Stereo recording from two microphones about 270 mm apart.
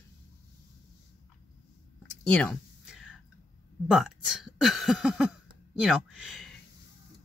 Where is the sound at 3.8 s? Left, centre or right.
Centre.